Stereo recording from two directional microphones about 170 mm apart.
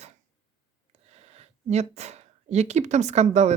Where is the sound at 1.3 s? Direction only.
40° right (ahead or behind).